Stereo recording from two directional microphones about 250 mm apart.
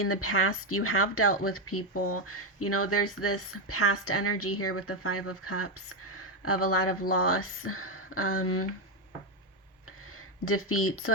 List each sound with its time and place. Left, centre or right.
0.0 s speech: left
10.2 s speech: left